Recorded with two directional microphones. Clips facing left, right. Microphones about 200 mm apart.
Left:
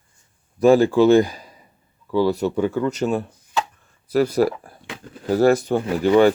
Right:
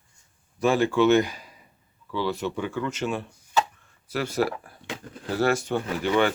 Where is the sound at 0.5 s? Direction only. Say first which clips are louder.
Left 7 dB; 35° left (ahead or behind).